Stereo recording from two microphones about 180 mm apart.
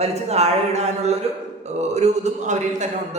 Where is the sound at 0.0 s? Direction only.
35° right (ahead or behind).